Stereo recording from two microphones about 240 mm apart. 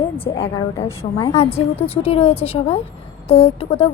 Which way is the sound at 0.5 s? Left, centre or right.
Centre.